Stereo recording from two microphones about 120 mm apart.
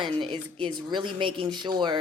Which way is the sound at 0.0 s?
45° right (ahead or behind).